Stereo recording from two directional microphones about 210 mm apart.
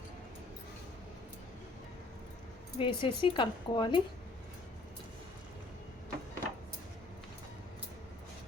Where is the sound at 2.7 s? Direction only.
25° left (ahead or behind).